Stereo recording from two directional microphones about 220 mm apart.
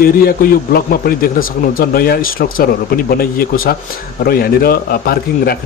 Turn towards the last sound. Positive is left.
turn(degrees=45)  # may be behind; listen again after turning